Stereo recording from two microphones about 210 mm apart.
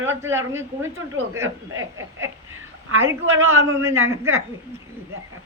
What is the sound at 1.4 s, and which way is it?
Speech, 70° right (ahead or behind).